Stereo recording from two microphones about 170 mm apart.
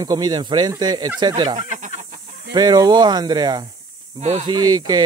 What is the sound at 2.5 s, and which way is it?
Speech, 25° right (ahead or behind).